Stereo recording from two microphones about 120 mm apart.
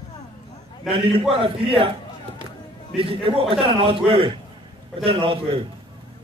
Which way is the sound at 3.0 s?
50° right (ahead or behind).